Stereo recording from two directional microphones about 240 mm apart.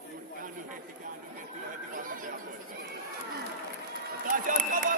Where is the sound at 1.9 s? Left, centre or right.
Right.